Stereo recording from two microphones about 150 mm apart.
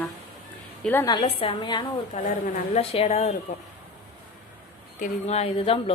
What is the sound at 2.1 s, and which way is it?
A woman's voice, 50° left (ahead or behind).